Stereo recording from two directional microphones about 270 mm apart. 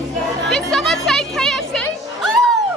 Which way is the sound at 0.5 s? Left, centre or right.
Centre.